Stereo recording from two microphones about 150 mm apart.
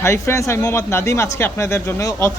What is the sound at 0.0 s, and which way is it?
Speech, 20° left (ahead or behind).